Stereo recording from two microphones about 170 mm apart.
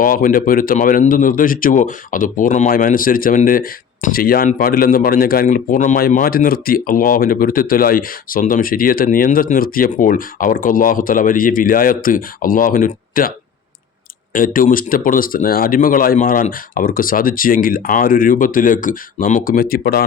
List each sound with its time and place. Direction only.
0.0 s speech: 55° left (ahead or behind)
14.3 s speech: 55° left (ahead or behind)